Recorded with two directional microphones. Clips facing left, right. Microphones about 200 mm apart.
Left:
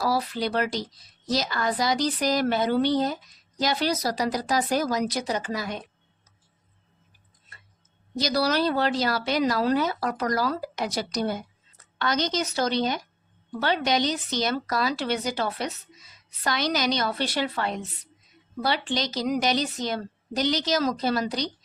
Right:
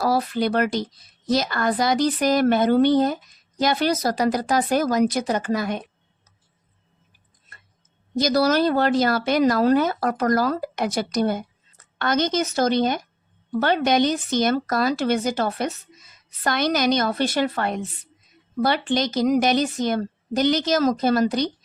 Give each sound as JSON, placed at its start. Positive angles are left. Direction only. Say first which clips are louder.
{"t": 0.0, "sound": "a woman's voice", "louder": "right 5 dB", "side_deg": -50}
{"t": 8.2, "sound": "a woman's voice", "louder": "right 5 dB", "side_deg": -45}